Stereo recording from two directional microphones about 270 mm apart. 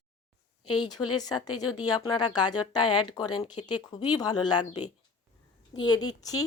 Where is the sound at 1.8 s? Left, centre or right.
Centre.